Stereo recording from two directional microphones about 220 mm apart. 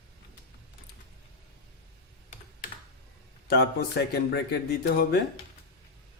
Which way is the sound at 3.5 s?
45° left (ahead or behind).